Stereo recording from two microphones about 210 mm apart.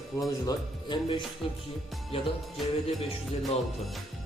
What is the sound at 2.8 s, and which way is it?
Speech, 30° left (ahead or behind).